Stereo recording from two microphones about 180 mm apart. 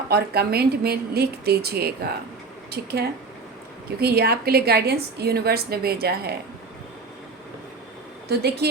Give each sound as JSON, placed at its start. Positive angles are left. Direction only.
{"t": 0.1, "sound": "a woman's voice", "side_deg": -60}
{"t": 8.3, "sound": "a woman's voice", "side_deg": -65}